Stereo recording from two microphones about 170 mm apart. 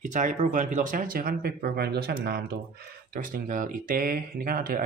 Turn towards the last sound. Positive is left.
turn(degrees=-60)  # may be behind; listen again after turning